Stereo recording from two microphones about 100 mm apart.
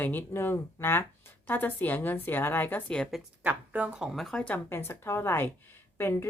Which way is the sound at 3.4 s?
15° right (ahead or behind).